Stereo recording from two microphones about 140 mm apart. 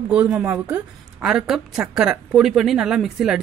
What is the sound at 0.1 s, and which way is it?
A woman's voice, 10° right (ahead or behind).